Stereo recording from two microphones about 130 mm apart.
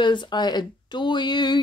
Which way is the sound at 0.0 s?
35° left (ahead or behind).